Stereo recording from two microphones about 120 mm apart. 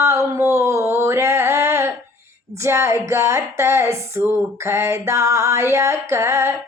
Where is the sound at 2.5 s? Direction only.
25° right (ahead or behind).